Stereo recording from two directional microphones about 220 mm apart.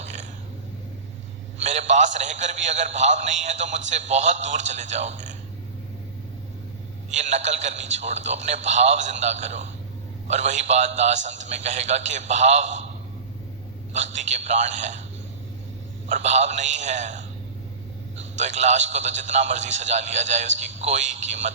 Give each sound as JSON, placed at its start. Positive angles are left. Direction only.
{"t": 0.0, "sound": "a sound", "side_deg": -30}
{"t": 1.5, "sound": "a sound", "side_deg": -30}
{"t": 2.1, "sound": "a man's voice", "side_deg": -30}
{"t": 7.1, "sound": "a man's voice", "side_deg": -30}
{"t": 13.9, "sound": "a man's voice", "side_deg": -30}
{"t": 16.0, "sound": "a man's voice", "side_deg": -30}